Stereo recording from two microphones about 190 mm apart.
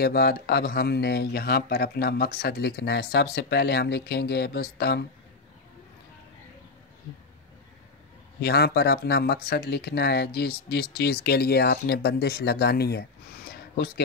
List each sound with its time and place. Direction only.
0.0 s speech: 55° left (ahead or behind)
8.4 s speech: 55° left (ahead or behind)
13.5 s a sound: 55° left (ahead or behind)